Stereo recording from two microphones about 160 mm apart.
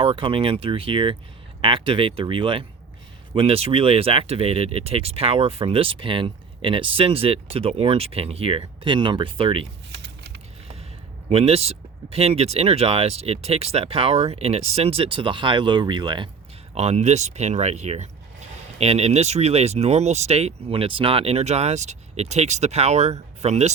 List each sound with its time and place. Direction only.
0.0 s speech: 35° right (ahead or behind)
11.3 s speech: 40° right (ahead or behind)
16.7 s speech: 40° right (ahead or behind)